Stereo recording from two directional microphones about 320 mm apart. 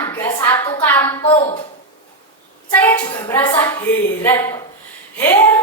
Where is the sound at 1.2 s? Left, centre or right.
Centre.